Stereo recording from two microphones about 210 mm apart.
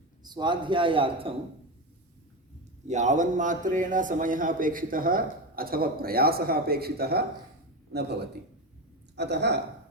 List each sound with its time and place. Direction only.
0.3 s a man's voice: 20° right (ahead or behind)
2.8 s a man's voice: 35° right (ahead or behind); by 9.6 s 55° right (ahead or behind)